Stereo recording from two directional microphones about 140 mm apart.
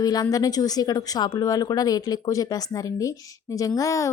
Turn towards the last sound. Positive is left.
turn(degrees=25)  # may be behind; listen again after turning